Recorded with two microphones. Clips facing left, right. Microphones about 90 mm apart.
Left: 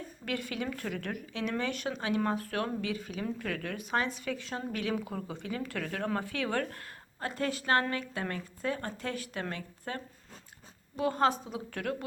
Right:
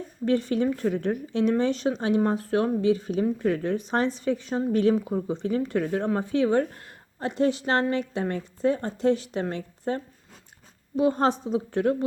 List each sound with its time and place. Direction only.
0.3 s a woman's voice: 30° right (ahead or behind)
4.7 s speech: 35° right (ahead or behind)
5.1 s a woman's voice: 20° right (ahead or behind)
5.5 s a woman's voice: 30° right (ahead or behind)
11.2 s a woman's voice: 30° right (ahead or behind)